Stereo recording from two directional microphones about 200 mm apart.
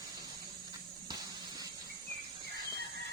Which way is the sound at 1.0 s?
20° right (ahead or behind).